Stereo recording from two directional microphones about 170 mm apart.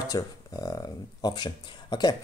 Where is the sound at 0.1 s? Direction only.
20° left (ahead or behind).